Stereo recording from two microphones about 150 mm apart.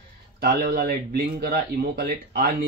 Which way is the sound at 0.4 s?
80° right.